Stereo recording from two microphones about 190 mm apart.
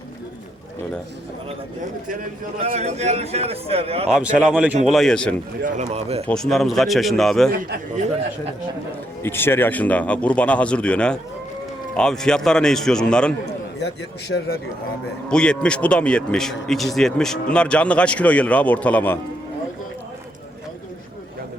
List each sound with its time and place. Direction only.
2.6 s a man's voice: 35° right (ahead or behind)
4.1 s speech: 5° right (ahead or behind)
5.6 s a man's voice: 40° right (ahead or behind)
6.2 s speech: 5° left (ahead or behind)
9.2 s speech: 10° left (ahead or behind)
13.4 s a man's voice: 60° left (ahead or behind)
15.3 s speech: 5° left (ahead or behind)